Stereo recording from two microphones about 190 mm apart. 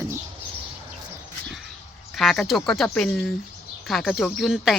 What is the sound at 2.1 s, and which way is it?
A woman's voice, centre (ahead or behind).